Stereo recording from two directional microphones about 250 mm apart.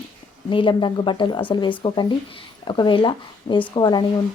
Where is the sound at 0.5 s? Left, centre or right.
Centre.